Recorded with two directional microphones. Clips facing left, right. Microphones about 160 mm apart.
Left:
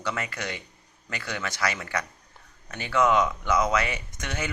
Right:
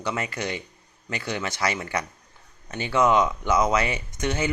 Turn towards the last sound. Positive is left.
turn(degrees=-25)  # may be behind; listen again after turning